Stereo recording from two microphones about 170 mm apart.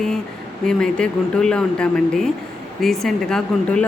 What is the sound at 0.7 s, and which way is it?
A woman's voice, 5° left (ahead or behind).